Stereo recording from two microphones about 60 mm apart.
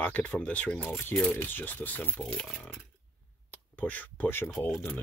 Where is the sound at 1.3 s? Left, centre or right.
Left.